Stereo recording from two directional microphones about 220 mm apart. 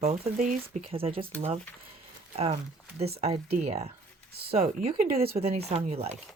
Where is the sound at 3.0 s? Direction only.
30° right (ahead or behind).